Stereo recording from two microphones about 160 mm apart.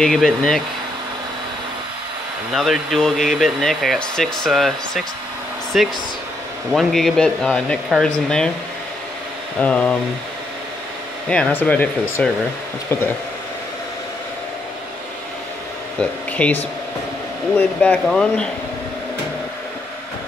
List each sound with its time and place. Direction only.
0.0 s speech: 5° left (ahead or behind)
2.5 s speech: centre (ahead or behind)
9.6 s speech: 5° left (ahead or behind)
11.2 s speech: 5° left (ahead or behind)
16.0 s speech: 10° left (ahead or behind)